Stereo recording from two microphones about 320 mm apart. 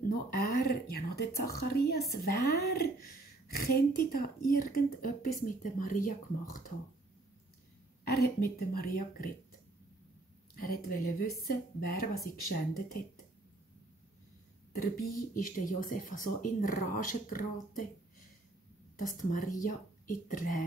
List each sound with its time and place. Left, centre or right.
0.3 s a woman's voice: left
8.1 s a woman's voice: left
10.5 s a woman's voice: left
14.7 s a woman's voice: left
18.9 s a woman's voice: left